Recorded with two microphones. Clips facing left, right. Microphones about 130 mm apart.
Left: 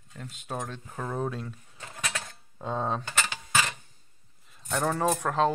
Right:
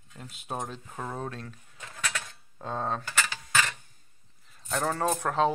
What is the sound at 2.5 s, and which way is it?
Speech, 5° left (ahead or behind).